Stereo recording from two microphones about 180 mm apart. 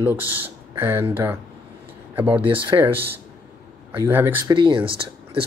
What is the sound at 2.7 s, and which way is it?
Speech, 20° right (ahead or behind).